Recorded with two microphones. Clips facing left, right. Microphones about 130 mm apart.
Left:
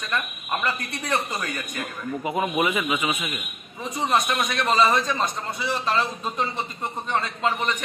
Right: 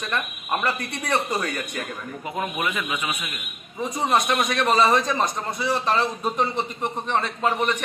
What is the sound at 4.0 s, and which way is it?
A man's voice, 15° right (ahead or behind).